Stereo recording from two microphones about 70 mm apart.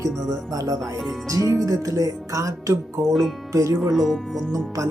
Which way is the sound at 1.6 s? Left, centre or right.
Right.